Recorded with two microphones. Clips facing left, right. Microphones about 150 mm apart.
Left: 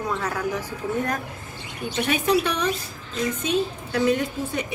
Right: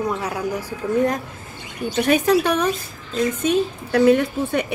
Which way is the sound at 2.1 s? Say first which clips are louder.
Right 5 dB; 45° right (ahead or behind).